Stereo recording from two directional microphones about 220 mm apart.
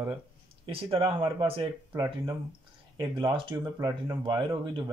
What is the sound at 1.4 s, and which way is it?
Speech, 25° right (ahead or behind).